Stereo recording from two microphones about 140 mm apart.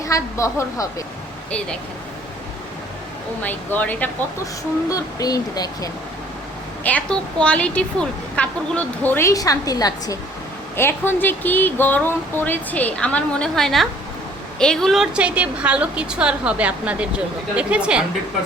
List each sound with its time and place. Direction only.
0.0 s a woman's voice: 20° left (ahead or behind)
3.4 s a woman's voice: 10° left (ahead or behind)
4.9 s a woman's voice: 25° left (ahead or behind)
6.8 s a woman's voice: 10° left (ahead or behind); by 10.2 s 25° left (ahead or behind)
10.8 s a woman's voice: 15° left (ahead or behind); by 18.0 s 10° right (ahead or behind)